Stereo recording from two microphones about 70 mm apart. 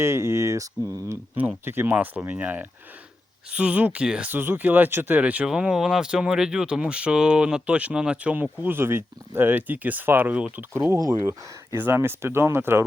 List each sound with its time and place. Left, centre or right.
0.0 s speech: right
1.4 s speech: right
2.1 s speech: right
4.3 s speech: right
8.4 s speech: right